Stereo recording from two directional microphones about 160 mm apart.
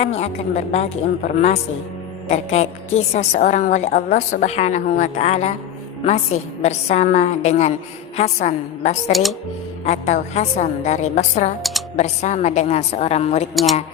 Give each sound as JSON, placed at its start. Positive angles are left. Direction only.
{"t": 0.0, "sound": "a woman's voice", "side_deg": 40}
{"t": 13.5, "sound": "speech", "side_deg": 0}